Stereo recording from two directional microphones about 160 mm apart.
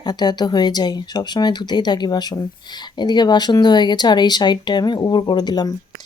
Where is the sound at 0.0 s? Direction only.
25° left (ahead or behind).